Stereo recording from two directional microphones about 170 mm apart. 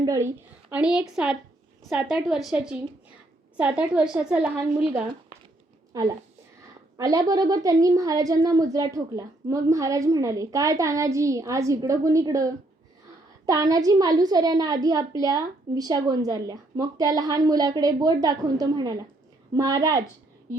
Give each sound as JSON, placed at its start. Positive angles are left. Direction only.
{"t": 0.0, "sound": "a woman's voice", "side_deg": -20}
{"t": 5.9, "sound": "a woman's voice", "side_deg": -20}